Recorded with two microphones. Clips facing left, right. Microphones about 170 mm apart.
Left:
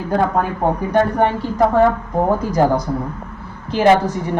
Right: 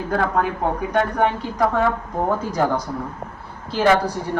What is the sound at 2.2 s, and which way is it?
Speech, 15° left (ahead or behind).